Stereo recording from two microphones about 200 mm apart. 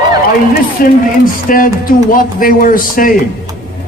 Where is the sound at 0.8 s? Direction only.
45° left (ahead or behind).